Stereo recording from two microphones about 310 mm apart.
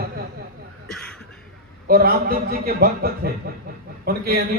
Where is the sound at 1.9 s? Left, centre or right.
Right.